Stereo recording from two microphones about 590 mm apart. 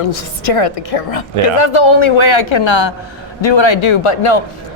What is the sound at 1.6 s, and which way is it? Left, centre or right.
Speech, left.